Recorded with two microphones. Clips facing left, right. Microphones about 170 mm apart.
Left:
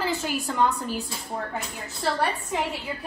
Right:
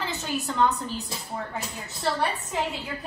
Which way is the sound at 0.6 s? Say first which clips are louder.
Even; 10° left (ahead or behind).